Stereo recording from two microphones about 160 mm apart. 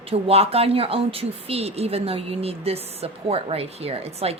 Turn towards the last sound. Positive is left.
turn(degrees=-40)  # may be behind; listen again after turning